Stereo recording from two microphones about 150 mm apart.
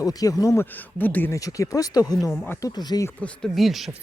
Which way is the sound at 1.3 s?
20° left (ahead or behind).